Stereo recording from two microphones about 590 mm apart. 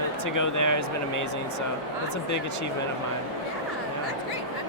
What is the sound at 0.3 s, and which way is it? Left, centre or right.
Speech, left.